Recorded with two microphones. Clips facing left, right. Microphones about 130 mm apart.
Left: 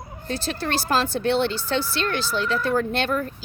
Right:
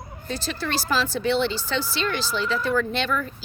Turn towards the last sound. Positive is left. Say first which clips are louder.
# left 1 dB
turn(degrees=50)  # may be behind; listen again after turning